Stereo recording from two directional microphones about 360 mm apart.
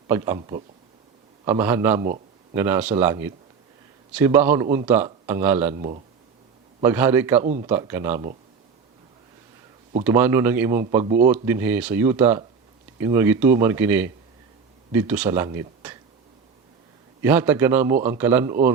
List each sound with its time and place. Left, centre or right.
0.1 s a man's voice: centre
2.0 s a sound: centre
2.6 s a man's voice: centre
6.8 s a man's voice: centre
7.4 s speech: centre
7.7 s a man's voice: centre
10.0 s a man's voice: centre
17.2 s a man's voice: centre